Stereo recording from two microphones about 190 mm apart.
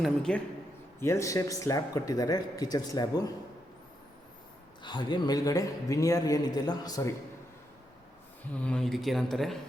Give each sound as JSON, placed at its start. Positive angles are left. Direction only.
{"t": 0.0, "sound": "speech", "side_deg": 5}
{"t": 0.9, "sound": "a man's voice", "side_deg": 15}
{"t": 4.8, "sound": "a man's voice", "side_deg": 25}
{"t": 8.5, "sound": "speech", "side_deg": 5}